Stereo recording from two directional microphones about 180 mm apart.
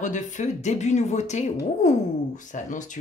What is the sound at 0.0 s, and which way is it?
A woman's voice, 45° left (ahead or behind).